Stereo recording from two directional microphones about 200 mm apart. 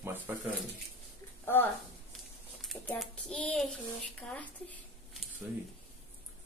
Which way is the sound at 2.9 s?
5° left (ahead or behind).